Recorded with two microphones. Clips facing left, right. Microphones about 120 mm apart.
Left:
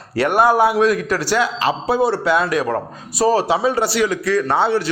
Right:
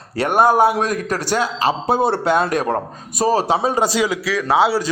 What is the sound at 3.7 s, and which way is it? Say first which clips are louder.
A man's voice: even; 15° right (ahead or behind).